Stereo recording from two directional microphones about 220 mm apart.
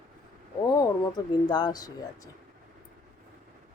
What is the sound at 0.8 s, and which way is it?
Speech, 20° left (ahead or behind).